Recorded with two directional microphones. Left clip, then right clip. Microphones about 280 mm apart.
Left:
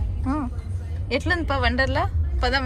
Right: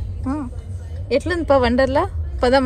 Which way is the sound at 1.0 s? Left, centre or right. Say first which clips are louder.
Right 6 dB; centre.